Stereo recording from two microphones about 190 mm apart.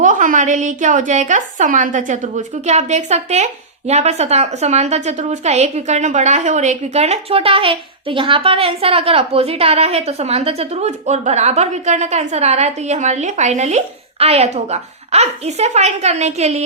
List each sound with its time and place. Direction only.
0.0 s a woman's voice: 40° right (ahead or behind)